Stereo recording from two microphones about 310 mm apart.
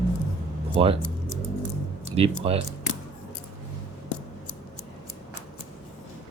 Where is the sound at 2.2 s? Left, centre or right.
Centre.